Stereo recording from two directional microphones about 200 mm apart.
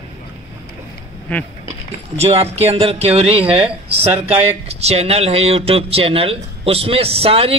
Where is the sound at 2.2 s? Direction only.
30° right (ahead or behind).